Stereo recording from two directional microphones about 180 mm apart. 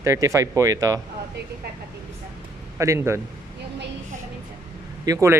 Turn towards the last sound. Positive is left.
turn(degrees=-15)  # may be behind; listen again after turning